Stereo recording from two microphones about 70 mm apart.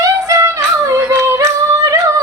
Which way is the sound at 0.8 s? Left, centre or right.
Right.